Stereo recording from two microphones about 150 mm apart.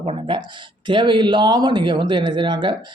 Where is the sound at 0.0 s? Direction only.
35° right (ahead or behind).